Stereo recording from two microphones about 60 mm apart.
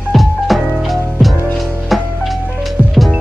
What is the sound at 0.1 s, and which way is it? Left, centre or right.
Music, centre.